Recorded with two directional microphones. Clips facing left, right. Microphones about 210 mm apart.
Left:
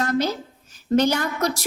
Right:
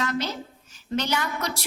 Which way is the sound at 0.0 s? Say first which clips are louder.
Left 6 dB; 45° left (ahead or behind).